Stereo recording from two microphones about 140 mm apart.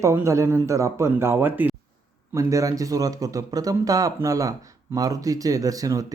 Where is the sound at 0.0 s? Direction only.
20° right (ahead or behind).